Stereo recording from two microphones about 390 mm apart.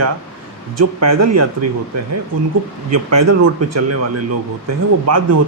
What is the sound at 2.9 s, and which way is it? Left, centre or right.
Speech, right.